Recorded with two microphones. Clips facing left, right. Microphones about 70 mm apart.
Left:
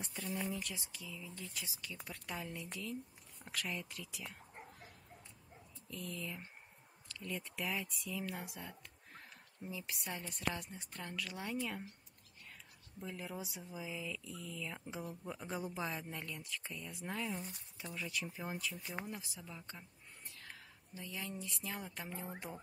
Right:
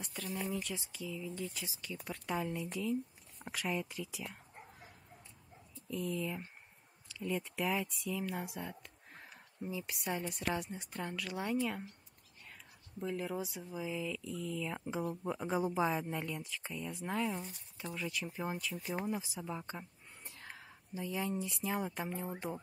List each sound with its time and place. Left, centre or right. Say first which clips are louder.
0.5 s speech: right 4 dB; centre
5.9 s speech: right 8 dB; centre
13.0 s speech: right 7 dB; centre
14.7 s speech: right 7 dB; centre
19.6 s a sound: right 7 dB; right
20.9 s speech: right 8 dB; right
22.1 s speech: right 6 dB; centre